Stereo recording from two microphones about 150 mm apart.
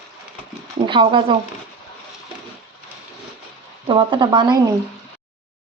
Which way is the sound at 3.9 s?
30° right (ahead or behind).